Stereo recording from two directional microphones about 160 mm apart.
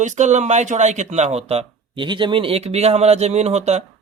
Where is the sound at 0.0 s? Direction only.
45° right (ahead or behind).